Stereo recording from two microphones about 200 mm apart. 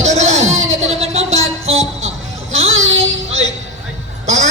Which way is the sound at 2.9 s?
80° right.